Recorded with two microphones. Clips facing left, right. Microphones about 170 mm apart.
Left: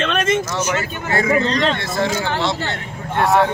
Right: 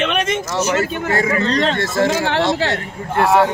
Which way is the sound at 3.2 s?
10° right (ahead or behind).